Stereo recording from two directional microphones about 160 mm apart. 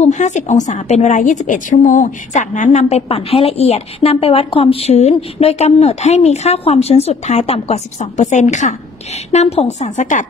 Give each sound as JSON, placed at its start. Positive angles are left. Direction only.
{"t": 0.0, "sound": "a woman's voice", "side_deg": 50}